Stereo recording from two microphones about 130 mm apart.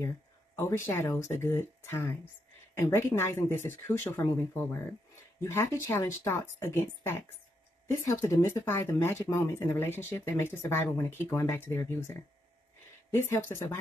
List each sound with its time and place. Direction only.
0.6 s speech: 20° left (ahead or behind)